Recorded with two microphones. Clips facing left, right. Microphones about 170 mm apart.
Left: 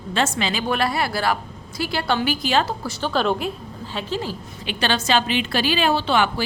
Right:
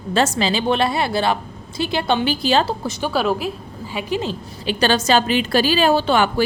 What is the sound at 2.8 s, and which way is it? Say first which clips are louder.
A woman's voice: right 2 dB; 10° right (ahead or behind).